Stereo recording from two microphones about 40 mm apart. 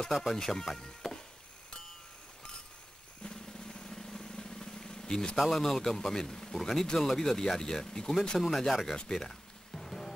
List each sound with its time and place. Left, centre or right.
0.1 s speech: centre
0.4 s speech: centre
3.3 s drum: centre
5.5 s speech: centre
9.1 s music: centre